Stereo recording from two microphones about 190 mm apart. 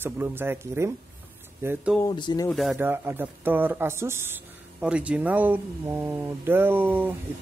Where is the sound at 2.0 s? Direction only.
25° left (ahead or behind).